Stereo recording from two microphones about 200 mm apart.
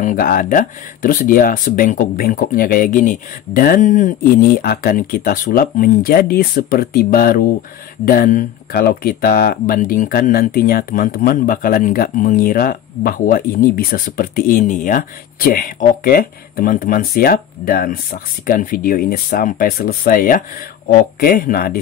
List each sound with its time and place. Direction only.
0.0 s speech: 45° left (ahead or behind)